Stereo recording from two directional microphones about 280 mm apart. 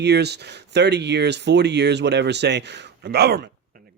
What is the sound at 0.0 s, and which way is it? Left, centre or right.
Speech, right.